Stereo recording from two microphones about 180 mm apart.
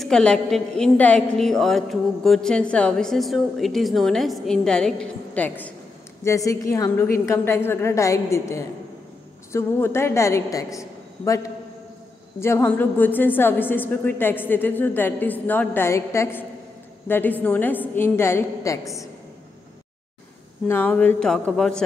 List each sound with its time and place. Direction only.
0.0 s a woman's voice: 5° left (ahead or behind)
20.6 s a woman's voice: 10° left (ahead or behind)